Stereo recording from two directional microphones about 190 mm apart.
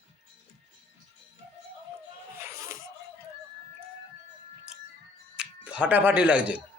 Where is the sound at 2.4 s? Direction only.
15° right (ahead or behind).